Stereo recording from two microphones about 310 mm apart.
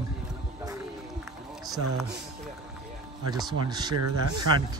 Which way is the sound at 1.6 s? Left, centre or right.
Centre.